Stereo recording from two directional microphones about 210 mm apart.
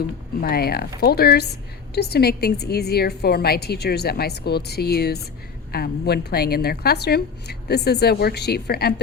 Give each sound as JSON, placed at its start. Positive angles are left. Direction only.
{"t": 0.4, "sound": "a woman's voice", "side_deg": 45}